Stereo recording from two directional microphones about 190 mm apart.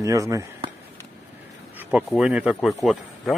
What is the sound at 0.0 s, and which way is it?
Speech, 15° right (ahead or behind).